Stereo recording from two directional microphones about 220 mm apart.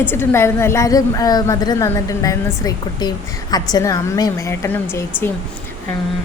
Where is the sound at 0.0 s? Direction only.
10° left (ahead or behind).